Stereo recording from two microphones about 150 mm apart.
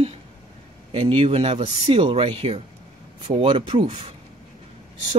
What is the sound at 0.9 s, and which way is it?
Speech, 40° right (ahead or behind).